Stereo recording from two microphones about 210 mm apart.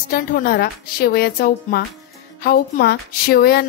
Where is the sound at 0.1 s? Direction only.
45° left (ahead or behind).